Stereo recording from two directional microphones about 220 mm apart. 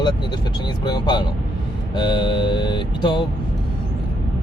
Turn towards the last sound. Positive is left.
turn(degrees=20)  # may be behind; listen again after turning